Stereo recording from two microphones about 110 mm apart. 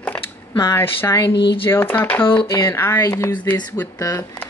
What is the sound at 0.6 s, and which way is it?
Speech, 25° left (ahead or behind).